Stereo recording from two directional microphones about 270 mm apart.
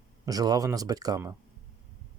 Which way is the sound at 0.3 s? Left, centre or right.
Centre.